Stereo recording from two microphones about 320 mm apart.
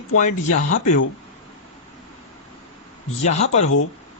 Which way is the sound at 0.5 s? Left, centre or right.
Left.